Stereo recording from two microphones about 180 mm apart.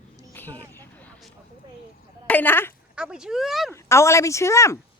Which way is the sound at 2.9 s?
5° right (ahead or behind).